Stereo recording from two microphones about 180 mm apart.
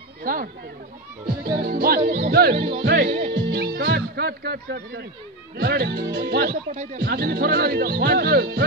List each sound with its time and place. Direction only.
0.2 s speech: 50° right (ahead or behind)
1.6 s music: 55° right (ahead or behind); by 2.8 s 35° right (ahead or behind)
2.8 s speech: 65° right (ahead or behind)
5.6 s music: 65° right (ahead or behind)
6.1 s speech: 65° right (ahead or behind)